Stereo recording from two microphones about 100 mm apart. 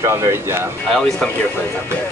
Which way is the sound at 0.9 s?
10° left (ahead or behind).